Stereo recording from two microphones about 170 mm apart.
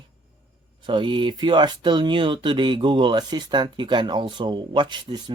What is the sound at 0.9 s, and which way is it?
Speech, 30° right (ahead or behind).